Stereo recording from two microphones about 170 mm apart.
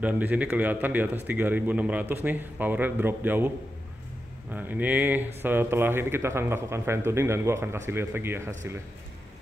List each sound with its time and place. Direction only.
0.0 s speech: 10° right (ahead or behind)